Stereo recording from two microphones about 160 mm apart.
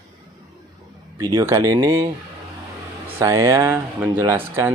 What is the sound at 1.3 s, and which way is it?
Speech, 20° right (ahead or behind).